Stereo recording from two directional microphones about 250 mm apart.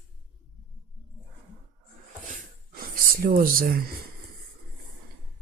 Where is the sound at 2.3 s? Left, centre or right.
Right.